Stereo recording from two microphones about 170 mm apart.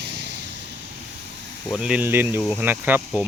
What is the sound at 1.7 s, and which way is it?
Speech, 5° right (ahead or behind).